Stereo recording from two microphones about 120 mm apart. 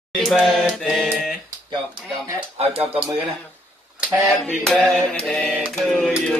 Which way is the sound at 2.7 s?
50° right (ahead or behind).